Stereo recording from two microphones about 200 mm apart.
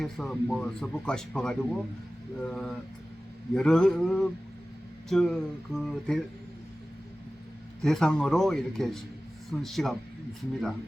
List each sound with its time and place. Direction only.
0.0 s speech: centre (ahead or behind)
7.9 s speech: centre (ahead or behind)